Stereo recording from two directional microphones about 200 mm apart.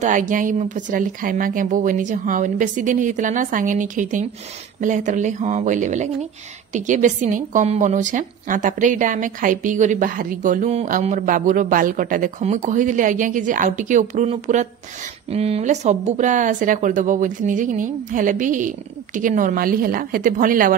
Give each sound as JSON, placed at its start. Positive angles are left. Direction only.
{"t": 0.0, "sound": "a woman's voice", "side_deg": -40}